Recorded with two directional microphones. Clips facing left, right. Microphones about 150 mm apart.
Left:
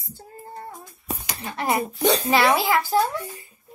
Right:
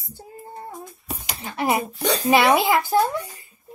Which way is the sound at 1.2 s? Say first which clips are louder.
Right 3 dB; 20° right (ahead or behind).